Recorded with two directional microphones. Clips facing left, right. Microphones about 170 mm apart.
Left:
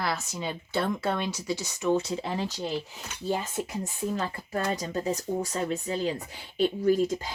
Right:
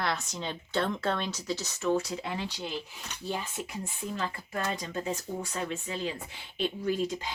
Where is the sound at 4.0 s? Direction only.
35° left (ahead or behind).